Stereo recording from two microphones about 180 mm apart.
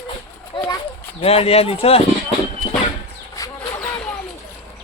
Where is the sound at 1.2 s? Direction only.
35° left (ahead or behind).